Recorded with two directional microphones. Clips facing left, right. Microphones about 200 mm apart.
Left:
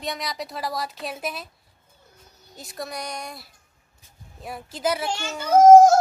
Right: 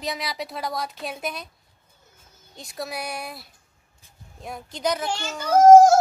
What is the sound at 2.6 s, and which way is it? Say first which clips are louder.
A woman's voice: right 1 dB; centre (ahead or behind).